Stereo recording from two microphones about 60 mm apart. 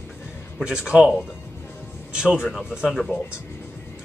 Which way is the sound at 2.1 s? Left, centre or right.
Centre.